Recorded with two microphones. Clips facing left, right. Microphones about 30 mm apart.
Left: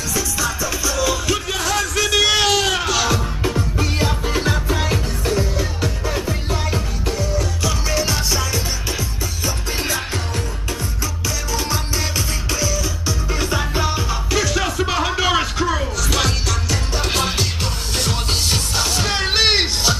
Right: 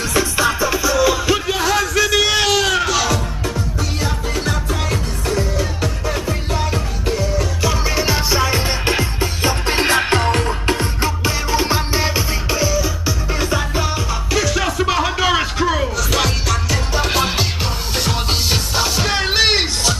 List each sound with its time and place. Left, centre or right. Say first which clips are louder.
0.1 s music: right 5 dB; right
0.8 s music: right 4 dB; centre
4.4 s music: left 1 dB; centre
5.3 s music: right 2 dB; centre; by 8.5 s right
8.5 s music: right 6 dB; right
11.2 s music: right 4 dB; right; by 13.5 s centre
13.5 s music: left 1 dB; centre